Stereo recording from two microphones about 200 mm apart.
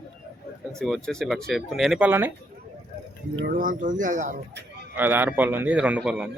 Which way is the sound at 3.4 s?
45° right (ahead or behind).